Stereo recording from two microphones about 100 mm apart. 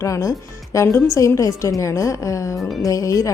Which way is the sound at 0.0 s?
35° left (ahead or behind).